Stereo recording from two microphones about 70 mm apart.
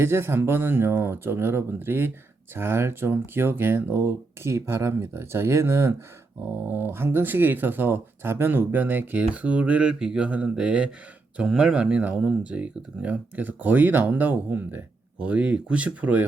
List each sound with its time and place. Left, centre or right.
0.0 s speech: right